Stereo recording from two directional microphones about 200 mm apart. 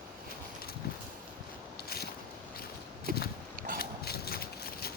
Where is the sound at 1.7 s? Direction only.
50° left (ahead or behind).